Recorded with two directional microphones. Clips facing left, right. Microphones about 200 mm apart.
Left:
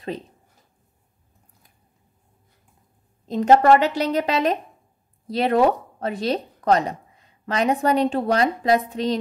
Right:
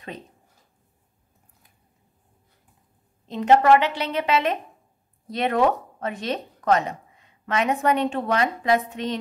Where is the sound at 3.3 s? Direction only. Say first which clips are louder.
Left 2 dB; 40° left (ahead or behind).